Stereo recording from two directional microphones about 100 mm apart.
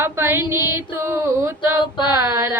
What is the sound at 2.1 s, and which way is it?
Child singing, 30° right (ahead or behind).